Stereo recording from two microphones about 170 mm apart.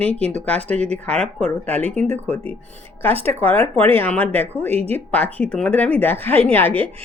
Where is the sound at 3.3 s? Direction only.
15° left (ahead or behind).